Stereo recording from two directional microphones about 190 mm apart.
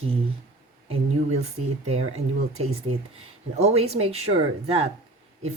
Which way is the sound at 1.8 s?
35° right (ahead or behind).